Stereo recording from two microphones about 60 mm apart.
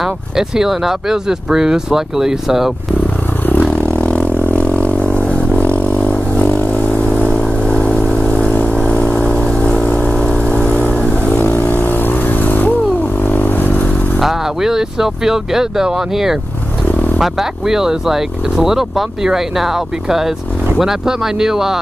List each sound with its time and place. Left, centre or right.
0.0 s speech: centre
3.4 s clatter: left
3.9 s vehicle: left
7.1 s vehicle: centre
10.5 s vehicle: left
13.2 s motorcycle: left
14.2 s speech: centre